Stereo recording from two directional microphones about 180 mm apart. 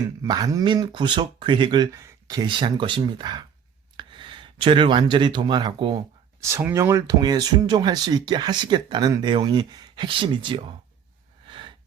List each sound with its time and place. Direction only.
0.2 s speech: 20° right (ahead or behind)
6.4 s speech: 15° right (ahead or behind); by 10.8 s 30° right (ahead or behind)
11.4 s gasp: 30° right (ahead or behind)